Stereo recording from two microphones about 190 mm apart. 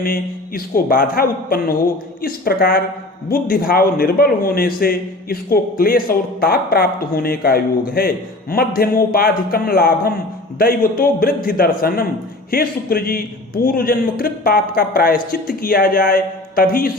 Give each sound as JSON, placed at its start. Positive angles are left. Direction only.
{"t": 0.0, "sound": "a man's voice", "side_deg": 50}